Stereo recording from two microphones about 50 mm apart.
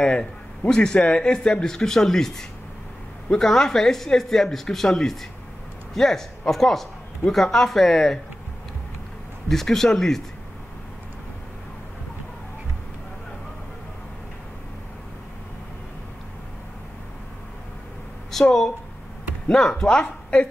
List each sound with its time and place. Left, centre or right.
0.0 s speech: centre
9.5 s speech: centre
18.3 s a sound: centre
19.5 s speech: centre